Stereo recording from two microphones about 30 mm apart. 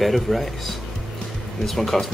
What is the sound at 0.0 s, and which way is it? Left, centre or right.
Speech, centre.